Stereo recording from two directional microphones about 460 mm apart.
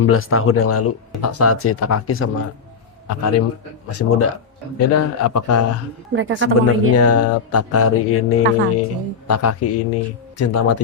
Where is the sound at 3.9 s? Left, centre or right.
Left.